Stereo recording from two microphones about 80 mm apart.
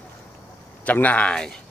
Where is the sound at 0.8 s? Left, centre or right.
Centre.